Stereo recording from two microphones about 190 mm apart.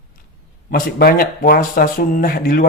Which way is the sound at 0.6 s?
50° left (ahead or behind).